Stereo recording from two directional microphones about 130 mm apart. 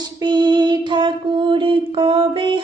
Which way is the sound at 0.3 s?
35° right (ahead or behind).